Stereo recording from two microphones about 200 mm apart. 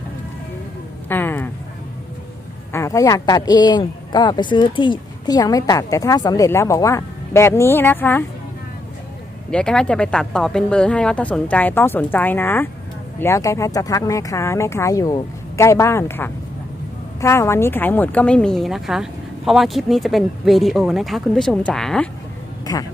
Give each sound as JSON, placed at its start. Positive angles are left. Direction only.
{"t": 1.0, "sound": "a sound", "side_deg": 10}
{"t": 2.7, "sound": "speech", "side_deg": 15}
{"t": 9.5, "sound": "speech", "side_deg": 5}
{"t": 22.6, "sound": "speech", "side_deg": 20}